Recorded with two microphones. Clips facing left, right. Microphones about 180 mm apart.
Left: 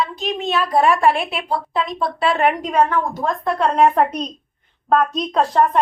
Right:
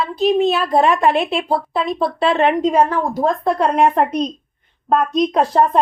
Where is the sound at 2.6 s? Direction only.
30° right (ahead or behind).